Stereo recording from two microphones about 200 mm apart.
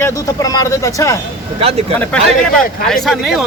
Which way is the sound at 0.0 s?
15° left (ahead or behind).